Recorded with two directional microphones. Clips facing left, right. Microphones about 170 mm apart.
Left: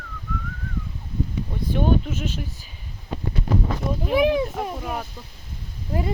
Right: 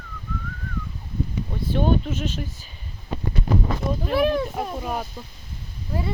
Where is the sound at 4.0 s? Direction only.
15° left (ahead or behind).